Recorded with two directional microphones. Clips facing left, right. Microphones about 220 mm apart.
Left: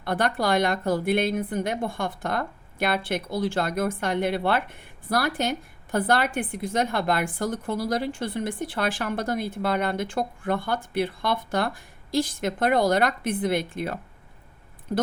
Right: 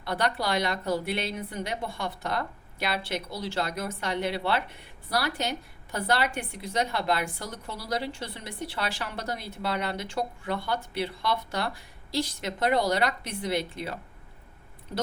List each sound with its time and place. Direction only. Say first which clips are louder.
0.0 s speech: left 4 dB; 50° left (ahead or behind)